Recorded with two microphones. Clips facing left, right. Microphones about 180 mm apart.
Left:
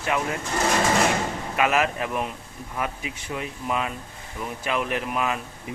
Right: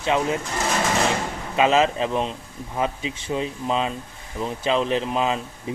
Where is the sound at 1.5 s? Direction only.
25° right (ahead or behind).